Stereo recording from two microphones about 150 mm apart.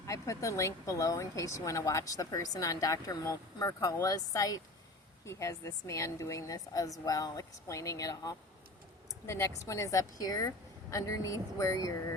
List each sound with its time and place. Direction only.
0.1 s speech: 20° left (ahead or behind)